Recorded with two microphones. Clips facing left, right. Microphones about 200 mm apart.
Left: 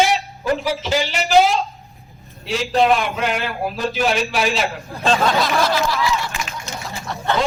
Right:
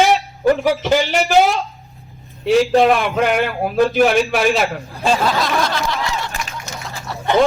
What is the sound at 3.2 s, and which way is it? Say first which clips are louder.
Speech: right 5 dB; 55° right (ahead or behind).